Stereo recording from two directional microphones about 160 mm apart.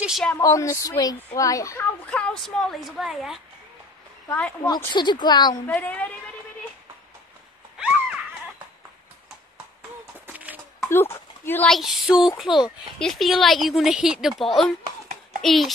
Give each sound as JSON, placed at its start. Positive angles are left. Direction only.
{"t": 0.0, "sound": "speech", "side_deg": 0}
{"t": 0.4, "sound": "speech", "side_deg": 20}
{"t": 2.0, "sound": "a woman's voice", "side_deg": 5}
{"t": 4.3, "sound": "a woman's voice", "side_deg": 10}
{"t": 4.9, "sound": "speech", "side_deg": 30}
{"t": 5.7, "sound": "a woman's voice", "side_deg": 10}
{"t": 7.7, "sound": "a sound", "side_deg": -5}
{"t": 10.2, "sound": "a sound", "side_deg": -10}
{"t": 10.9, "sound": "speech", "side_deg": 15}
{"t": 11.7, "sound": "a woman's voice", "side_deg": 0}
{"t": 14.8, "sound": "a sound", "side_deg": -45}
{"t": 15.4, "sound": "a woman's voice", "side_deg": 0}